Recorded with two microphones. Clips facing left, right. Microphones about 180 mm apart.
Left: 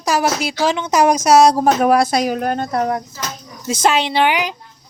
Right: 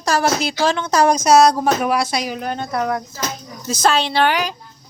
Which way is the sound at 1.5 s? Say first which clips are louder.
Left 4 dB; 45° left (ahead or behind).